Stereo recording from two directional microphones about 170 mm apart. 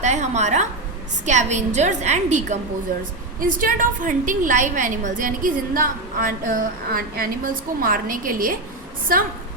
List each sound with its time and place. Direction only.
0.0 s a woman's voice: 45° right (ahead or behind)